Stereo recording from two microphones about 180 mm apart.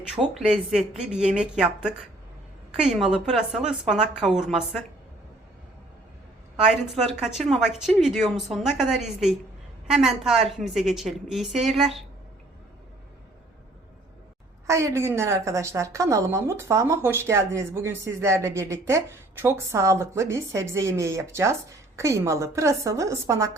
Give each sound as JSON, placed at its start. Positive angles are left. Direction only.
{"t": 0.2, "sound": "a woman's voice", "side_deg": 0}
{"t": 7.2, "sound": "a woman's voice", "side_deg": 0}
{"t": 14.7, "sound": "a woman's voice", "side_deg": -15}